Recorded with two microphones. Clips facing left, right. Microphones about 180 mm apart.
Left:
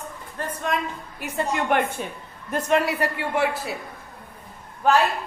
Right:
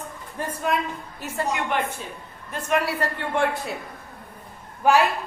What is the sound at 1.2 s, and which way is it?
Speech, 15° left (ahead or behind).